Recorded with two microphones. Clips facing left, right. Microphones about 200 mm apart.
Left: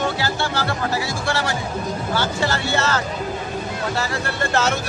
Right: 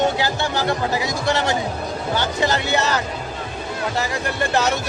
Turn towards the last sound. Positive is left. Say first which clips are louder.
# right 1 dB
turn(degrees=-15)  # may be behind; listen again after turning